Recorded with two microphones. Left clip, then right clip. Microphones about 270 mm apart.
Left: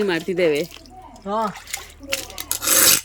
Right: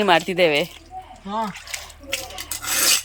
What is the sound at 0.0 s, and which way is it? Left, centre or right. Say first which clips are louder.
Speech: right 3 dB; centre.